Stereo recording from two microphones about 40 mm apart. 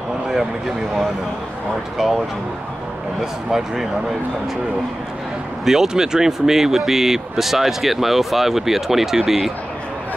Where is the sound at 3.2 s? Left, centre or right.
Centre.